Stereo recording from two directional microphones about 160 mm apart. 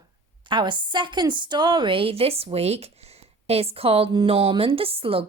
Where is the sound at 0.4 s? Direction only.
30° right (ahead or behind).